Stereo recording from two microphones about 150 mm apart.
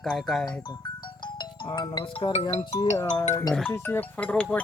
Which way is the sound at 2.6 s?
25° left (ahead or behind).